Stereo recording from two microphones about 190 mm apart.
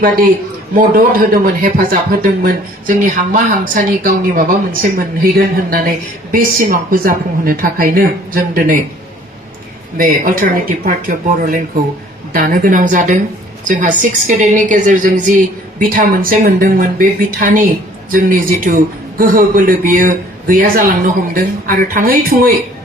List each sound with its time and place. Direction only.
0.8 s speech: 50° right (ahead or behind)
10.0 s speech: 50° right (ahead or behind)